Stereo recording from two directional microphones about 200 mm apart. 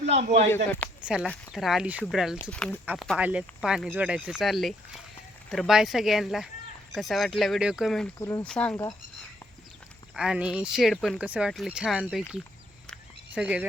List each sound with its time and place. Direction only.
0.1 s speech: 35° right (ahead or behind)
0.5 s speech: 10° left (ahead or behind)
1.0 s speech: 5° right (ahead or behind)
8.2 s speech: 15° left (ahead or behind)
10.2 s speech: 5° right (ahead or behind)
13.3 s speech: 5° right (ahead or behind)